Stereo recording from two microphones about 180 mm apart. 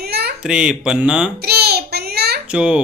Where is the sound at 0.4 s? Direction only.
5° right (ahead or behind).